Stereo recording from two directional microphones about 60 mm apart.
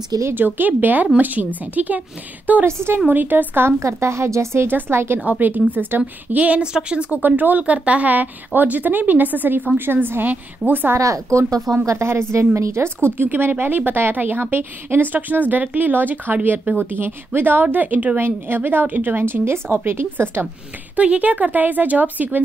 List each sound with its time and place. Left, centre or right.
0.3 s a woman's voice: right
2.6 s a woman's voice: right
3.1 s speech: right
3.8 s a woman's voice: right
4.6 s speech: right
5.2 s a woman's voice: right
7.2 s a woman's voice: right
11.0 s a woman's voice: right
20.9 s a woman's voice: right